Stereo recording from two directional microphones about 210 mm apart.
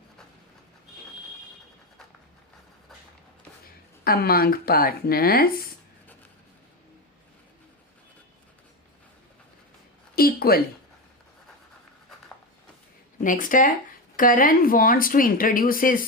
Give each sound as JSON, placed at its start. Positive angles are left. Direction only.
{"t": 4.0, "sound": "speech", "side_deg": 45}
{"t": 10.2, "sound": "speech", "side_deg": 45}
{"t": 13.2, "sound": "speech", "side_deg": 40}